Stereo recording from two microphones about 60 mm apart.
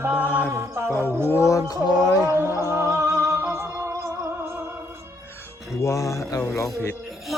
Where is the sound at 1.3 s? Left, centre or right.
Left.